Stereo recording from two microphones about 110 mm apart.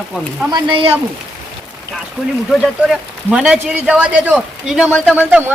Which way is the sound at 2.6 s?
5° right (ahead or behind).